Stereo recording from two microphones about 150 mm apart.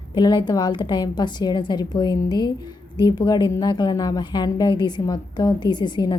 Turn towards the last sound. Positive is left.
turn(degrees=30)  # may be behind; listen again after turning